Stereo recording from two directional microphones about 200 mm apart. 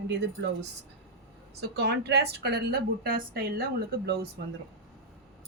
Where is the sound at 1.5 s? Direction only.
55° right (ahead or behind).